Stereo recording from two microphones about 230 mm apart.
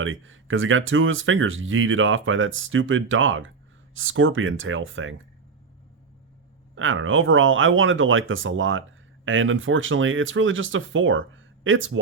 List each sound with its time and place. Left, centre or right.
0.0 s speech: right
6.7 s speech: right